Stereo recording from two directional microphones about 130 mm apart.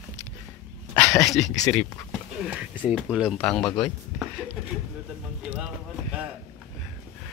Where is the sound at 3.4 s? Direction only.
5° left (ahead or behind).